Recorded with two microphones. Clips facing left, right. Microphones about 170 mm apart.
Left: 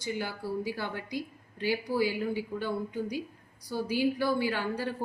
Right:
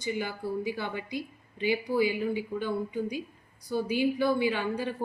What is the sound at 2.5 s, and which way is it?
Speech, 10° left (ahead or behind).